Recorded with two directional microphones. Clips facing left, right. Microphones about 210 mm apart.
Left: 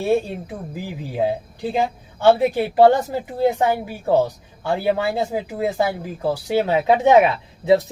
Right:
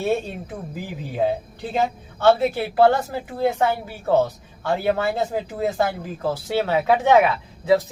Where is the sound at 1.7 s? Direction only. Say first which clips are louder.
Even; 15° left (ahead or behind).